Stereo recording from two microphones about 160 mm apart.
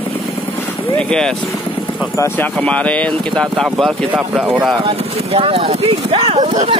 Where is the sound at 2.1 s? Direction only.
15° left (ahead or behind); by 4.8 s 5° right (ahead or behind).